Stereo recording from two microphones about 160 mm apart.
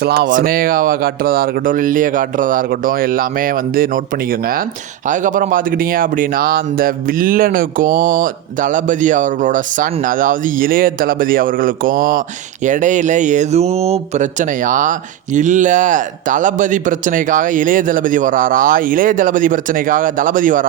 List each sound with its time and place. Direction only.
0.0 s speech: 90° right
0.3 s speech: 60° right (ahead or behind)
5.0 s speech: 55° right (ahead or behind)